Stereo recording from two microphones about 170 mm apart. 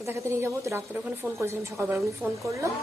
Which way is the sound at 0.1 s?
15° right (ahead or behind).